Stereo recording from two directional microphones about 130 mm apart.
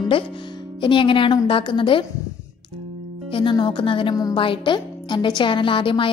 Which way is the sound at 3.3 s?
35° left (ahead or behind).